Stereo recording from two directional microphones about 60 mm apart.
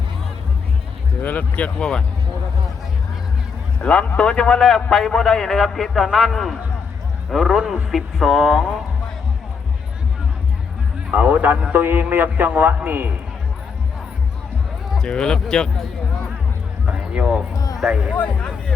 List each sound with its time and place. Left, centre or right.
1.2 s speech: left
3.8 s a man's voice: centre
11.1 s a man's voice: right
14.9 s speech: centre
16.8 s run: centre
17.9 s speech: centre
18.2 s speech: left